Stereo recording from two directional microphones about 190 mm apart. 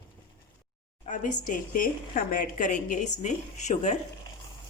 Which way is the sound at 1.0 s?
40° left (ahead or behind).